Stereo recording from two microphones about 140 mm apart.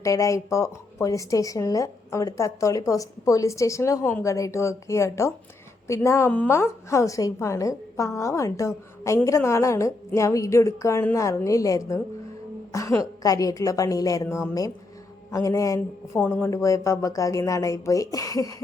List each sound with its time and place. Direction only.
0.0 s a woman's voice: 20° left (ahead or behind)